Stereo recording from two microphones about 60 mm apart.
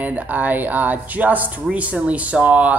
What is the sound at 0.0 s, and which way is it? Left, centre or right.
Speech, right.